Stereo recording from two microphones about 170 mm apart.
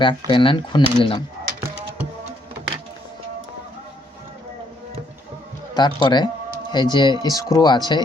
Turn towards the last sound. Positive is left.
turn(degrees=25)  # may be behind; listen again after turning